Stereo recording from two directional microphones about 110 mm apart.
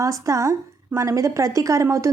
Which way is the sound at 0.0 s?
30° right (ahead or behind).